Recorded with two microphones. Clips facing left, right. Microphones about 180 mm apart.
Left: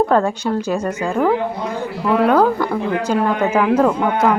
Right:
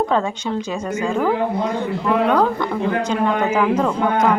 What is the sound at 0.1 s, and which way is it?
Speech, 50° left (ahead or behind).